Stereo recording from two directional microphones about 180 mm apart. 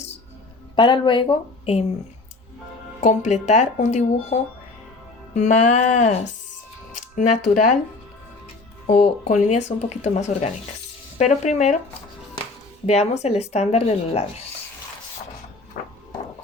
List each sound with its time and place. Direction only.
0.8 s speech: 25° left (ahead or behind)
3.0 s speech: 40° left (ahead or behind)
7.5 s speech: 45° left (ahead or behind)
8.9 s speech: 45° left (ahead or behind)
12.8 s speech: 35° left (ahead or behind)
15.8 s a sound: 50° left (ahead or behind)